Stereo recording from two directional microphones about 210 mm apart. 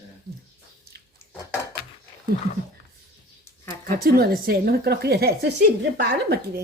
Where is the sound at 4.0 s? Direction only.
45° right (ahead or behind).